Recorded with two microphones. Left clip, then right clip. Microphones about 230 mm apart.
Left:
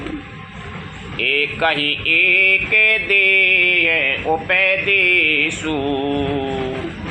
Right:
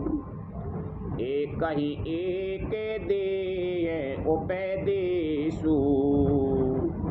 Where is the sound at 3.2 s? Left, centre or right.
Left.